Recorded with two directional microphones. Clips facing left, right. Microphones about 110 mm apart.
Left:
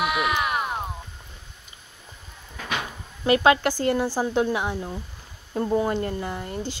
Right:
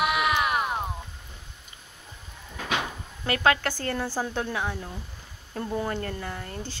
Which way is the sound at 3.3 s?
20° left (ahead or behind).